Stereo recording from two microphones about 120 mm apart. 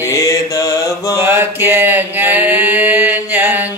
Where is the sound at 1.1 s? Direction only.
20° right (ahead or behind).